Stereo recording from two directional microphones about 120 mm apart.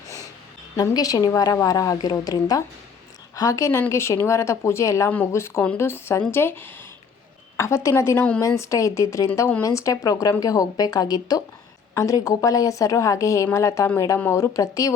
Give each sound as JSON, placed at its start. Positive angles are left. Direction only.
{"t": 0.8, "sound": "a woman's voice", "side_deg": 30}